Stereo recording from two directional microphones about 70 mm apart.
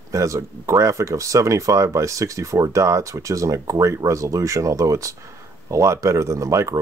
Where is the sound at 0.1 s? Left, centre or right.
Right.